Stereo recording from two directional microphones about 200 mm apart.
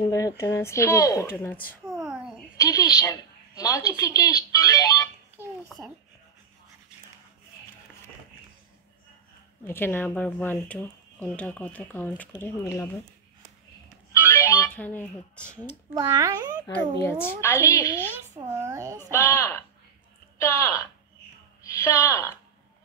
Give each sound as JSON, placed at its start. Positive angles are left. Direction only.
{"t": 0.1, "sound": "speech", "side_deg": 15}
{"t": 2.0, "sound": "a sound", "side_deg": -5}
{"t": 2.5, "sound": "a woman's voice", "side_deg": 15}
{"t": 9.7, "sound": "speech", "side_deg": 10}
{"t": 13.8, "sound": "music", "side_deg": 15}
{"t": 15.9, "sound": "a child's voice", "side_deg": -15}
{"t": 17.0, "sound": "speech", "side_deg": 10}
{"t": 18.5, "sound": "a child's voice", "side_deg": -15}
{"t": 19.0, "sound": "speech", "side_deg": 15}